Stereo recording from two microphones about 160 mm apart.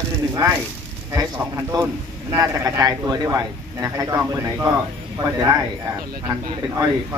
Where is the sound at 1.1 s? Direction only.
20° right (ahead or behind).